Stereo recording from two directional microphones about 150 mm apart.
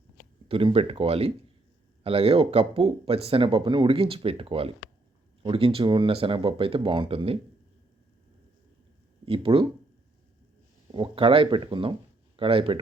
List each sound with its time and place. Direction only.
0.4 s speech: 40° right (ahead or behind)
9.2 s speech: 35° right (ahead or behind)
10.9 s speech: 35° right (ahead or behind)